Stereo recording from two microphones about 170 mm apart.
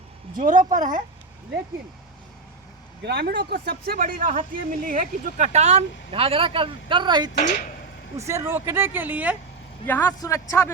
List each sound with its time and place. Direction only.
0.3 s speech: 50° right (ahead or behind)
3.1 s speech: 75° right (ahead or behind); by 7.3 s 25° right (ahead or behind)
8.1 s speech: 15° right (ahead or behind)
9.8 s a man's voice: 15° left (ahead or behind)